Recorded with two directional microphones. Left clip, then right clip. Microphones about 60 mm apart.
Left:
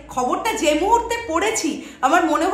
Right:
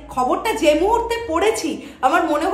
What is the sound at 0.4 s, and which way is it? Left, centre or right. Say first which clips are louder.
A woman's voice: right 3 dB; right.